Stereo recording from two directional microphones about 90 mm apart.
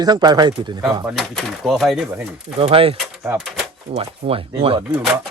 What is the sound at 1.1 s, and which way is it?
Speech, centre (ahead or behind).